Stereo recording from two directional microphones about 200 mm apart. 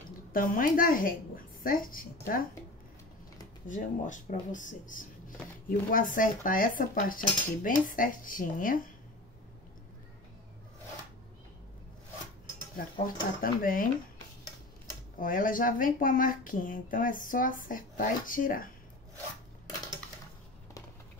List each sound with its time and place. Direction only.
0.3 s a woman's voice: 45° left (ahead or behind)
3.6 s speech: 40° left (ahead or behind)
13.0 s speech: 45° left (ahead or behind)
15.1 s speech: 45° left (ahead or behind)